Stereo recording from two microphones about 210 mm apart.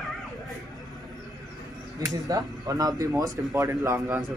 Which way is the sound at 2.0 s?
15° right (ahead or behind).